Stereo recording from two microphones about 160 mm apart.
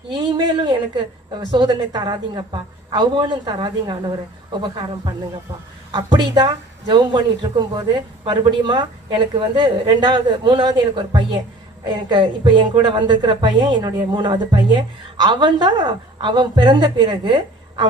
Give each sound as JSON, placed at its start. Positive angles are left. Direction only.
{"t": 0.1, "sound": "a woman's voice", "side_deg": -30}